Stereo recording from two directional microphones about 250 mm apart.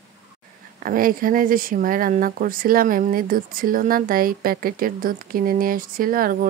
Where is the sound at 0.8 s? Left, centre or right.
Right.